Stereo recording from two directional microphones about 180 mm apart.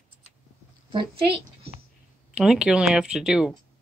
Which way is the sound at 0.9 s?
30° right (ahead or behind).